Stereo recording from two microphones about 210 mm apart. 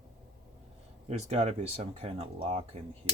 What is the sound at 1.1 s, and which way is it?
Speech, 30° right (ahead or behind).